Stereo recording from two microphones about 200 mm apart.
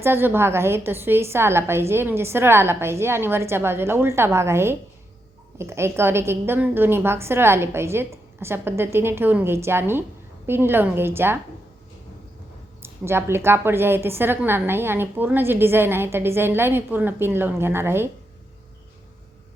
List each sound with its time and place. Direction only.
0.0 s a woman's voice: 10° right (ahead or behind)
12.8 s a woman's voice: 10° right (ahead or behind)